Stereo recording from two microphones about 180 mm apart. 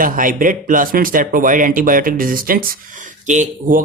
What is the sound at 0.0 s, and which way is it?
A man's voice, 50° right (ahead or behind).